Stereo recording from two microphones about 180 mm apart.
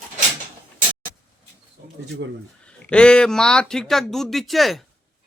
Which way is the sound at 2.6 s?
5° left (ahead or behind).